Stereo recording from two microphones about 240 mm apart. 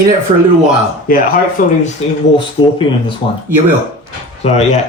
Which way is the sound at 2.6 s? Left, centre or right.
Left.